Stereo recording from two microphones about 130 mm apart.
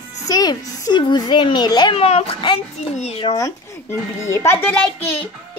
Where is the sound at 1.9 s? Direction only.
50° left (ahead or behind).